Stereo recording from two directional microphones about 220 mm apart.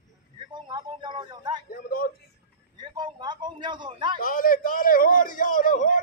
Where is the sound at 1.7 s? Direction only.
45° left (ahead or behind).